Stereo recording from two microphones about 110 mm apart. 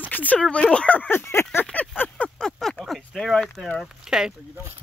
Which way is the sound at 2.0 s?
10° left (ahead or behind).